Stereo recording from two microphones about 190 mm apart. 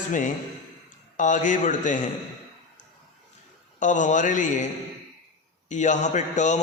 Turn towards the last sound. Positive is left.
turn(degrees=40)  # may be behind; listen again after turning